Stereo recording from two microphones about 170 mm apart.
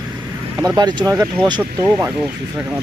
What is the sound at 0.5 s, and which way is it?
Speech, 25° right (ahead or behind).